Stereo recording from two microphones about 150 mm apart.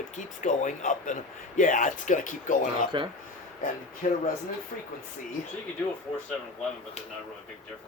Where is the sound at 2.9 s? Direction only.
35° right (ahead or behind).